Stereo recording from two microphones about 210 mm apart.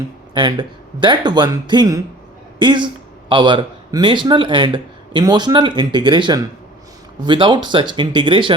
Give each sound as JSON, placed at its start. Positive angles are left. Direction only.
{"t": 0.3, "sound": "speech", "side_deg": -20}